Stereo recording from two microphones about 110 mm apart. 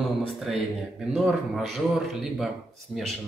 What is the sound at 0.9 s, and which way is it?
A man's voice, 5° right (ahead or behind).